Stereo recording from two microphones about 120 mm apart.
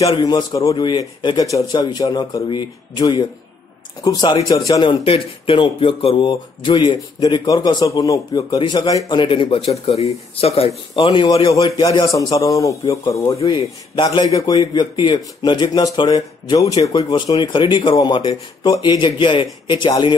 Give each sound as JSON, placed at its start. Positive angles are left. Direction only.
{"t": 0.2, "sound": "a man's voice", "side_deg": 35}
{"t": 5.1, "sound": "a man's voice", "side_deg": 50}
{"t": 9.2, "sound": "a man's voice", "side_deg": 45}
{"t": 11.8, "sound": "a man's voice", "side_deg": 35}
{"t": 13.4, "sound": "a man's voice", "side_deg": 40}